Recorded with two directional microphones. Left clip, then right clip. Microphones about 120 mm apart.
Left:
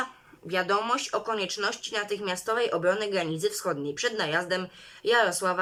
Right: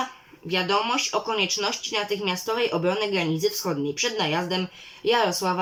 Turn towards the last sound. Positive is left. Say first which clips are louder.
# right 2 dB
turn(degrees=-25)  # may be behind; listen again after turning